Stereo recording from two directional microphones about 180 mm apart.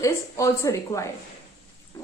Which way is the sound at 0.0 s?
15° left (ahead or behind).